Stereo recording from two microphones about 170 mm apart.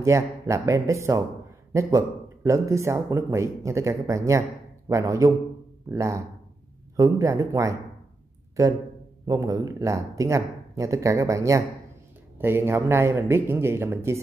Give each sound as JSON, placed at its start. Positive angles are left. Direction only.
{"t": 0.0, "sound": "speech", "side_deg": -15}
{"t": 9.3, "sound": "speech", "side_deg": -20}